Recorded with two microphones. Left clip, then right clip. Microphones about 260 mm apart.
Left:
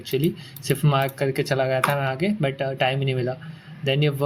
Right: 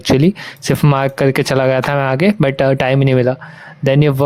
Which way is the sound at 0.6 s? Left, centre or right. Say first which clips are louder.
Right 7 dB; right.